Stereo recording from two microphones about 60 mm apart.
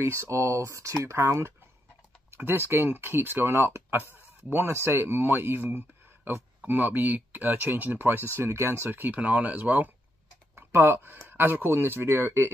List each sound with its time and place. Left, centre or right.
0.0 s speech: right
2.3 s speech: right
10.5 s a sound: right
11.2 s speech: right